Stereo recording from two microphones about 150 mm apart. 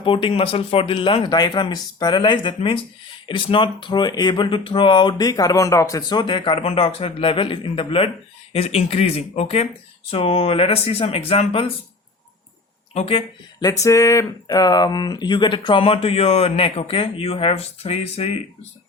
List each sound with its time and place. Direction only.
0.0 s speech: 35° left (ahead or behind)
12.9 s speech: 40° left (ahead or behind)
13.7 s speech: 20° left (ahead or behind); by 18.3 s 40° left (ahead or behind)